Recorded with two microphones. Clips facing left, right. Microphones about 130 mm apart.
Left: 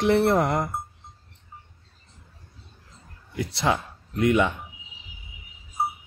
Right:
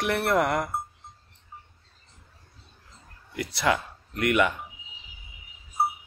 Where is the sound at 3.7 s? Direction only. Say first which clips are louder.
Left 1 dB; 25° left (ahead or behind).